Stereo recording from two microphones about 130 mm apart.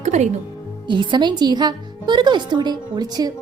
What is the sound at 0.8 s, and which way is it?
A woman's voice, 35° right (ahead or behind).